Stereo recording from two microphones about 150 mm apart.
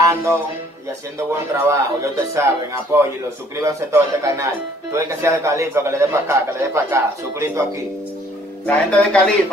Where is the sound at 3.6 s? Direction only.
20° right (ahead or behind).